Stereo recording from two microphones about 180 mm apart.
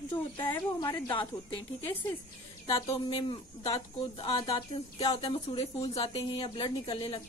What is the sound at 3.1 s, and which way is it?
Speech, 25° left (ahead or behind).